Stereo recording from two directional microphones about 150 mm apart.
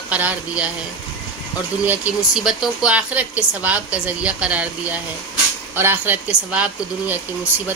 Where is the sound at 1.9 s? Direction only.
5° right (ahead or behind).